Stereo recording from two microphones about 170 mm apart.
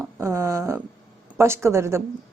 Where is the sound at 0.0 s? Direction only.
15° right (ahead or behind).